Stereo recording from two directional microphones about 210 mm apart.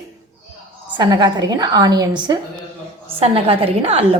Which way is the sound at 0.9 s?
20° right (ahead or behind).